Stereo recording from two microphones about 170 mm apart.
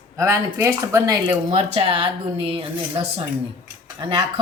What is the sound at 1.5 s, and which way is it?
Speech, 35° right (ahead or behind).